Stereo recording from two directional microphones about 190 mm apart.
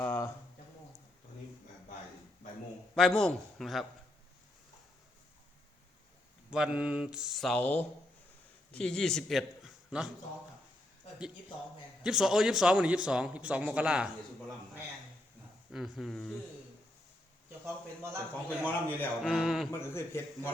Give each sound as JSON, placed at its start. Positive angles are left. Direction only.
{"t": 0.0, "sound": "a sound", "side_deg": 10}
{"t": 2.9, "sound": "a man's voice", "side_deg": 5}
{"t": 6.5, "sound": "a man's voice", "side_deg": -5}
{"t": 12.0, "sound": "a man's voice", "side_deg": 0}
{"t": 15.7, "sound": "a man's voice", "side_deg": 0}
{"t": 17.7, "sound": "a man's voice", "side_deg": -15}
{"t": 18.4, "sound": "a man's voice", "side_deg": 10}
{"t": 19.2, "sound": "a man's voice", "side_deg": 0}
{"t": 19.8, "sound": "a man's voice", "side_deg": 10}